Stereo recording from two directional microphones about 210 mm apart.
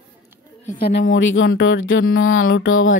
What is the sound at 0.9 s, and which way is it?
Speech, 60° left (ahead or behind).